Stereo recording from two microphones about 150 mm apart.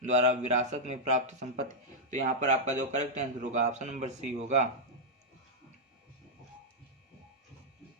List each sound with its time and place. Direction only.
0.0 s a man's voice: 50° right (ahead or behind)